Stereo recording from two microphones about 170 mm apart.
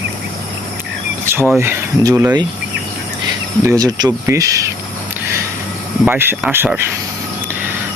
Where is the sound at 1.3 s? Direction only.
15° right (ahead or behind).